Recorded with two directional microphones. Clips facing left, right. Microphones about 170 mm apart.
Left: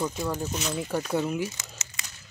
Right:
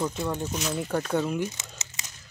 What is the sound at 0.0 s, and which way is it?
Speech, centre (ahead or behind).